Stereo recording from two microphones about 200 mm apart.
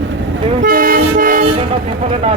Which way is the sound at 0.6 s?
45° right (ahead or behind).